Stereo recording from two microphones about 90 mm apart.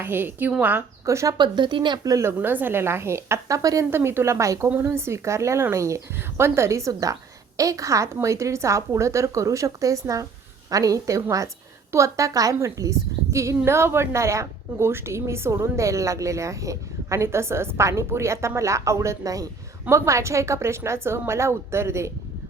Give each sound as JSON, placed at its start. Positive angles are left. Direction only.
{"t": 0.0, "sound": "a woman's voice", "side_deg": -25}
{"t": 1.0, "sound": "a woman's voice", "side_deg": -35}
{"t": 1.4, "sound": "speech", "side_deg": -60}
{"t": 2.0, "sound": "a woman's voice", "side_deg": -35}
{"t": 2.4, "sound": "a woman's voice", "side_deg": -20}
{"t": 3.6, "sound": "a woman's voice", "side_deg": -40}
{"t": 3.8, "sound": "a woman's voice", "side_deg": -25}